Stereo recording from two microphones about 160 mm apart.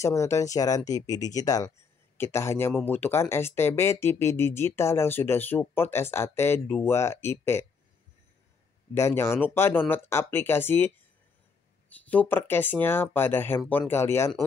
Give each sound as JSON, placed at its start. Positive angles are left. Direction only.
{"t": 0.0, "sound": "speech", "side_deg": 20}
{"t": 8.9, "sound": "speech", "side_deg": 15}
{"t": 11.9, "sound": "speech", "side_deg": 10}